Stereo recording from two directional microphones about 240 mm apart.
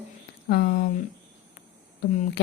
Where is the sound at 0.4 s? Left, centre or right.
Left.